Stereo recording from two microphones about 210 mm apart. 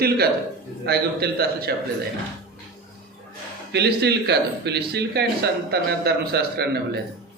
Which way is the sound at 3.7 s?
55° right (ahead or behind).